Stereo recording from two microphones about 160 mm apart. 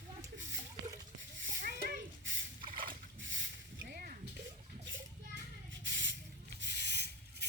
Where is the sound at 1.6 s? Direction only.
70° right (ahead or behind).